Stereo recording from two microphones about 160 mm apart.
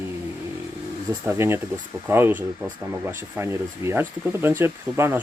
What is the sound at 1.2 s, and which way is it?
Speech, 15° right (ahead or behind).